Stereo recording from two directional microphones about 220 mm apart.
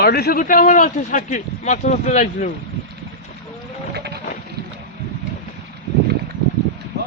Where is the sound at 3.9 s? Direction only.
45° right (ahead or behind).